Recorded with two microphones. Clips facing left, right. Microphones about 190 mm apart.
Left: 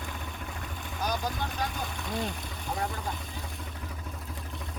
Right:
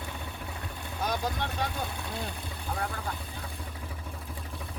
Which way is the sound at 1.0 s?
Centre (ahead or behind).